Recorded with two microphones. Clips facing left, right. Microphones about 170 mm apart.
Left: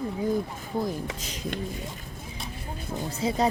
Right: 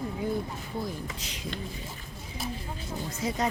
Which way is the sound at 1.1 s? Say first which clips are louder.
Left 4 dB; 45° left (ahead or behind).